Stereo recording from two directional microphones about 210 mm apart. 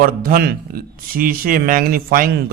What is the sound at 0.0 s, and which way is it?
Speech, 45° right (ahead or behind).